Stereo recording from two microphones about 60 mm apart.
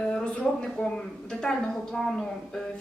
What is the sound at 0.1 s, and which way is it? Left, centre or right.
Speech, centre.